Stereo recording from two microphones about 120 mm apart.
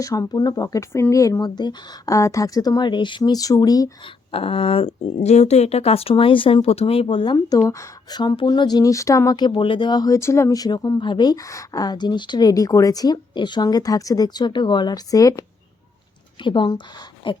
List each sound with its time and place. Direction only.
0.0 s a woman's voice: 30° left (ahead or behind)
4.0 s speech: 50° left (ahead or behind)
5.2 s speech: 70° left (ahead or behind); by 7.3 s 45° left (ahead or behind)
7.7 s a woman's voice: 30° left (ahead or behind)
16.4 s speech: 45° left (ahead or behind)